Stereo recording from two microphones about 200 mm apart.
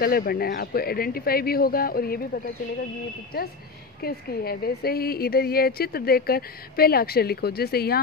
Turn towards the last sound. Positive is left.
turn(degrees=50)  # may be behind; listen again after turning